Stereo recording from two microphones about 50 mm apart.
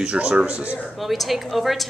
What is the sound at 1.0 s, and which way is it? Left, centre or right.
Speech, centre.